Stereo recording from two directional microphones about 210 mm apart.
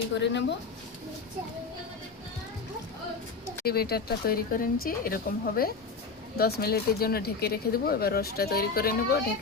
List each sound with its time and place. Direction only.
0.1 s speech: 55° left (ahead or behind)
3.7 s speech: 50° left (ahead or behind)